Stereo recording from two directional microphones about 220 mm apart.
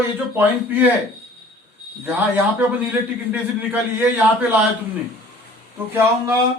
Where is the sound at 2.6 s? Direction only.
10° right (ahead or behind).